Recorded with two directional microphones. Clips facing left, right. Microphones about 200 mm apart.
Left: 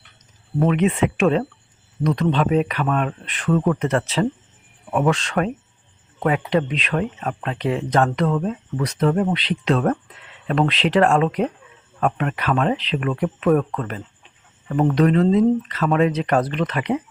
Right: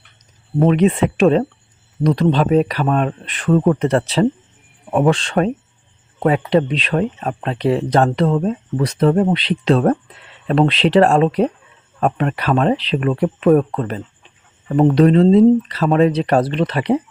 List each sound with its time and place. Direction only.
0.6 s speech: 35° right (ahead or behind)